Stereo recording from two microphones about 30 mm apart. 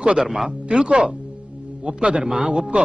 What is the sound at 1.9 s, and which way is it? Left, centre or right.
Speech, right.